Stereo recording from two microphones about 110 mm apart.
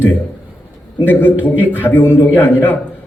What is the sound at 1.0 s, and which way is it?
A man's voice, 15° left (ahead or behind).